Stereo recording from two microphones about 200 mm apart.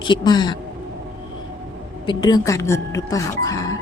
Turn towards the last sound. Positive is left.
turn(degrees=15)  # may be behind; listen again after turning